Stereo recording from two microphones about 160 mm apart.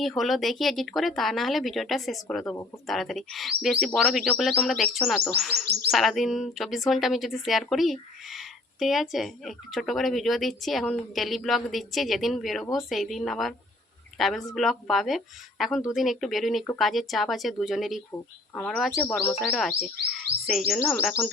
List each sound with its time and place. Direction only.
0.2 s speech: centre (ahead or behind)
2.4 s speech: 15° left (ahead or behind)
2.8 s speech: centre (ahead or behind)